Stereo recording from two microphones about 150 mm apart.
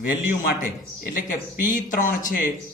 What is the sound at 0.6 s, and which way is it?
Speech, 70° left (ahead or behind).